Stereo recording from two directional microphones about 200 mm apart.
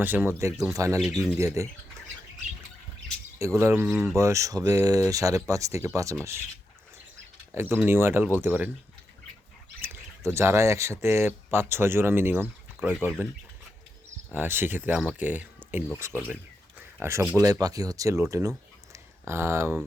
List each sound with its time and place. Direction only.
0.0 s speech: 10° right (ahead or behind)
3.3 s speech: 15° right (ahead or behind)
7.5 s speech: 10° right (ahead or behind)
9.8 s speech: 10° right (ahead or behind)
14.3 s speech: 10° right (ahead or behind)